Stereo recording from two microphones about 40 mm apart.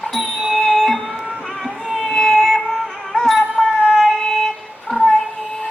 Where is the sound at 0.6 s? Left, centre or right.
Centre.